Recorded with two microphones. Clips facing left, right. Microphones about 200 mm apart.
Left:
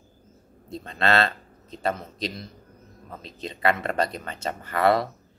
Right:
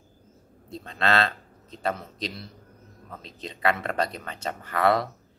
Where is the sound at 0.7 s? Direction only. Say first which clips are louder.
Left 2 dB; centre (ahead or behind).